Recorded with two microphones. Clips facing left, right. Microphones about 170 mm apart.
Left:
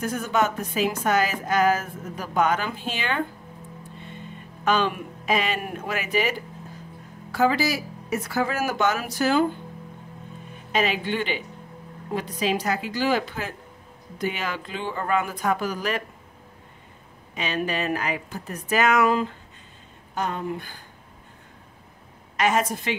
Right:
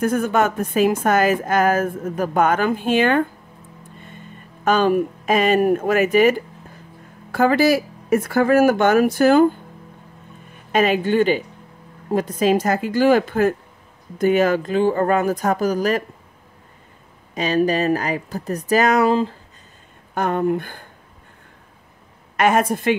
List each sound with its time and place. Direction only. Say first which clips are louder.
0.0 s a woman's voice: right 6 dB; 55° right (ahead or behind)
4.6 s a woman's voice: right 7 dB; 45° right (ahead or behind)
10.7 s a woman's voice: right 7 dB; 50° right (ahead or behind)
17.3 s speech: right 9 dB; 40° right (ahead or behind)
20.2 s speech: right 8 dB; 55° right (ahead or behind)
22.4 s speech: right 6 dB; 55° right (ahead or behind)